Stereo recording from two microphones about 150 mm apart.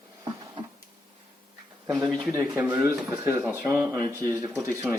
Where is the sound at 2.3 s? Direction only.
15° right (ahead or behind).